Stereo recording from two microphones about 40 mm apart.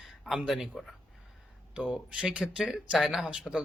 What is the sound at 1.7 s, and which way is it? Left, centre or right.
Speech, right.